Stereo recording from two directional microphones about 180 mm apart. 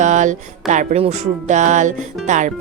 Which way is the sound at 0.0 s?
45° right (ahead or behind).